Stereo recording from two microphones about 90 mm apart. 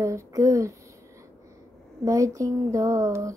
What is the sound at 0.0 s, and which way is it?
Speech, 35° right (ahead or behind).